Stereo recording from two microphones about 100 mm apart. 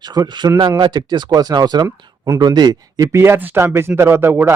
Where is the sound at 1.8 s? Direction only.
25° right (ahead or behind).